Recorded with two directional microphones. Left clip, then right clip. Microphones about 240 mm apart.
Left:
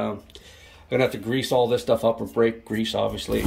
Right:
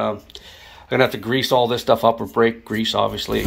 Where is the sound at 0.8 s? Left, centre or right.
Centre.